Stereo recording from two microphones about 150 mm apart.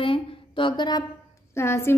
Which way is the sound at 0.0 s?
35° left (ahead or behind).